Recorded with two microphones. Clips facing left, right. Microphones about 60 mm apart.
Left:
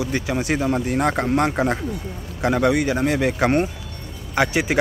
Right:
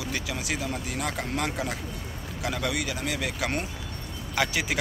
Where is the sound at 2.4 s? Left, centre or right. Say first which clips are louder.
Left 11 dB; left.